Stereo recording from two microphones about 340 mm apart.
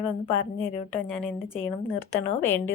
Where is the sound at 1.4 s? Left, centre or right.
Centre.